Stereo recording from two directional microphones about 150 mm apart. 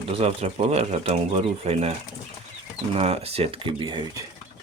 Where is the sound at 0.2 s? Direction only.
45° right (ahead or behind).